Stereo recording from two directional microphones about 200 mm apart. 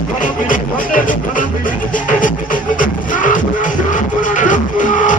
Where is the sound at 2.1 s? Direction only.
40° left (ahead or behind).